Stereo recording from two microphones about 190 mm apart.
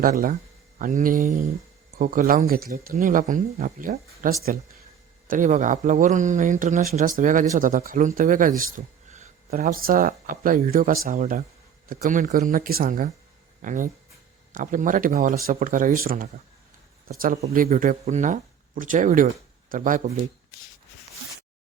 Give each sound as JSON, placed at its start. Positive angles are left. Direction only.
{"t": 0.0, "sound": "speech", "side_deg": -45}